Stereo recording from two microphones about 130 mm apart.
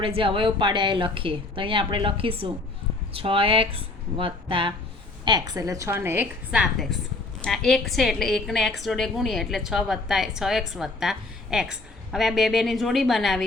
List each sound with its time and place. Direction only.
0.0 s a woman's voice: 45° right (ahead or behind)
5.2 s a woman's voice: 30° right (ahead or behind)
6.9 s a woman's voice: 5° left (ahead or behind)